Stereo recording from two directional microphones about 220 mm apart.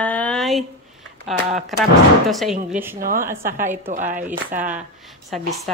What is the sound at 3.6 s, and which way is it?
Speech, 35° right (ahead or behind).